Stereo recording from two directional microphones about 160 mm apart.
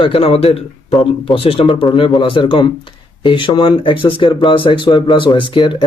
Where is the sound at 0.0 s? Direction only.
35° left (ahead or behind).